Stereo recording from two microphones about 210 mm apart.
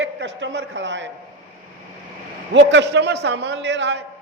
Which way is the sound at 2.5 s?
55° right (ahead or behind).